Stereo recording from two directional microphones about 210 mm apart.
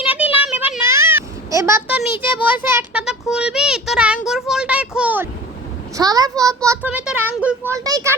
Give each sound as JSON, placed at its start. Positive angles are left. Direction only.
{"t": 0.4, "sound": "a child's voice", "side_deg": -5}